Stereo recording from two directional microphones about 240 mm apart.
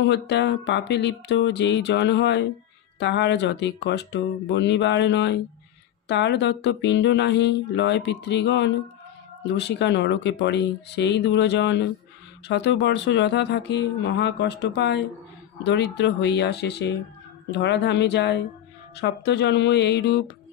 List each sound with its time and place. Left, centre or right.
0.1 s speech: left